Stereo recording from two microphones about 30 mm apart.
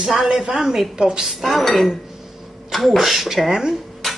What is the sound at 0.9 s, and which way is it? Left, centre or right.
Speech, right.